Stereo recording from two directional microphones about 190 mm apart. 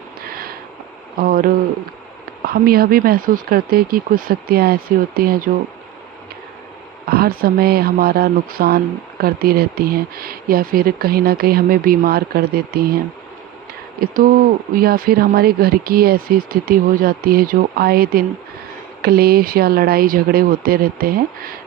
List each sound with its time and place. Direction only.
0.3 s a sound: 50° right (ahead or behind)
1.2 s speech: 50° right (ahead or behind)
7.1 s speech: 50° right (ahead or behind)
14.0 s speech: 45° right (ahead or behind)